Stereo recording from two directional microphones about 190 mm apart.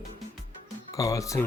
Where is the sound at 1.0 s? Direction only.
15° left (ahead or behind).